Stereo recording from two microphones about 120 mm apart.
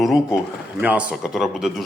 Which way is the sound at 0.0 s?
Centre (ahead or behind).